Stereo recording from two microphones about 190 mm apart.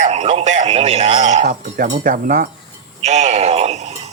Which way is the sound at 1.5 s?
50° right (ahead or behind).